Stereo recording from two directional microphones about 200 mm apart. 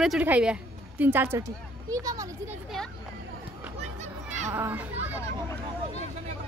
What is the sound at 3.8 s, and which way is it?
Children playing, 35° right (ahead or behind).